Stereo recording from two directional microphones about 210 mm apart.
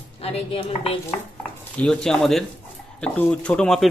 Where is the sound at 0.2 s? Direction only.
30° left (ahead or behind).